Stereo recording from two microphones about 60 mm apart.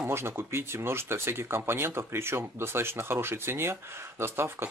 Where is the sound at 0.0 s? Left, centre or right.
Right.